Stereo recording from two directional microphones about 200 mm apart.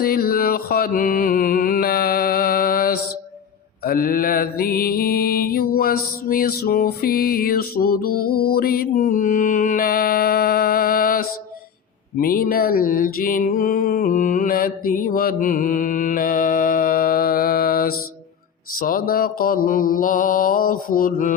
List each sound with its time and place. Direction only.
0.0 s mantra: 50° left (ahead or behind)
3.8 s music: 45° left (ahead or behind)
8.4 s mantra: 50° left (ahead or behind)
18.8 s music: 45° left (ahead or behind)